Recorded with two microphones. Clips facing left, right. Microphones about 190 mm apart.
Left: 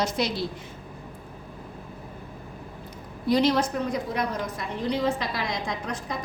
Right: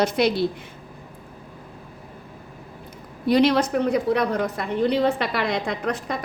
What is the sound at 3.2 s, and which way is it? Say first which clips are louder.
A woman's voice: right 4 dB; 65° right (ahead or behind).